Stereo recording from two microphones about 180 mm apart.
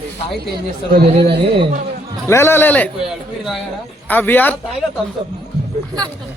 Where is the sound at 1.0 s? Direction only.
30° right (ahead or behind).